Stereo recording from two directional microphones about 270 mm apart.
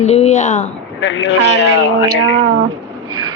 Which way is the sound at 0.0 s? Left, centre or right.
Left.